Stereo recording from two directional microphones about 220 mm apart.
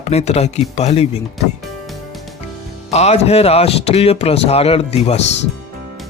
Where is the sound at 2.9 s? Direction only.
30° left (ahead or behind).